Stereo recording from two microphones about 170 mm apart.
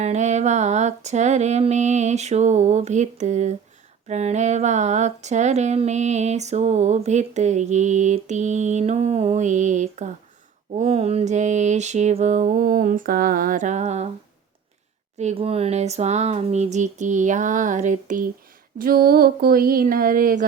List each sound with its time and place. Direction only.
0.0 s speech: 40° right (ahead or behind)
15.2 s speech: 40° right (ahead or behind)
18.8 s speech: 60° right (ahead or behind)